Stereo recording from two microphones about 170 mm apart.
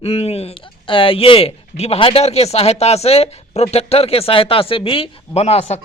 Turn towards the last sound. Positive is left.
turn(degrees=40)  # may be behind; listen again after turning